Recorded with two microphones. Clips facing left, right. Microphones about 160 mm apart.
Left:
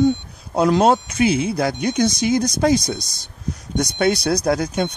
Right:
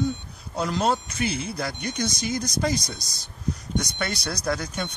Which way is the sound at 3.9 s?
75° left (ahead or behind).